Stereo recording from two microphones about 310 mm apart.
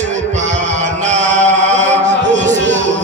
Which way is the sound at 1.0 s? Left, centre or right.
Right.